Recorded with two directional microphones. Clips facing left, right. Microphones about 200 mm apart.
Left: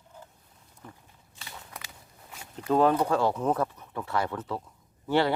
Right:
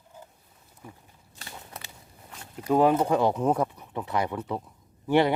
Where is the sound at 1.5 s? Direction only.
25° right (ahead or behind).